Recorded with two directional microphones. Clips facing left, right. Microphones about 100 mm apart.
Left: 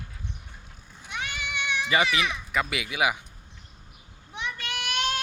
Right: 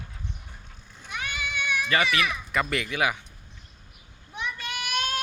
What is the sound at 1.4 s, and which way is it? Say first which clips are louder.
Baby cry: right 1 dB; 20° left (ahead or behind).